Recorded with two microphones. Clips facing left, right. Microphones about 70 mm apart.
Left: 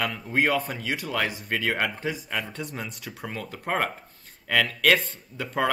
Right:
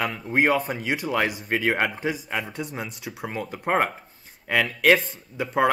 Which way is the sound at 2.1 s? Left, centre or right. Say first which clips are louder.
Right 2 dB; centre.